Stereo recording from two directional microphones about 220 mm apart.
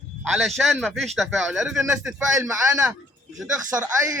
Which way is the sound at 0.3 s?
Centre (ahead or behind).